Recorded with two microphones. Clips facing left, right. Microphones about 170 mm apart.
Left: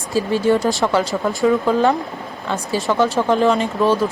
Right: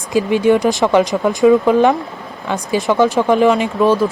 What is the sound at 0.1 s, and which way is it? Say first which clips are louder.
Speech: right 4 dB; 15° right (ahead or behind).